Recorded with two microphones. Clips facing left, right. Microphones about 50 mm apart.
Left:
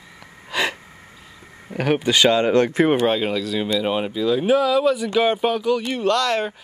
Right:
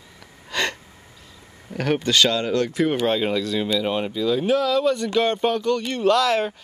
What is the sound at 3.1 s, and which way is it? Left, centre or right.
Speech, centre.